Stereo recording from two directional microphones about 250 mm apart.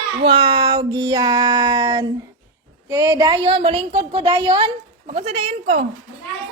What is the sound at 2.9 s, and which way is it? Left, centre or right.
A woman's voice, centre.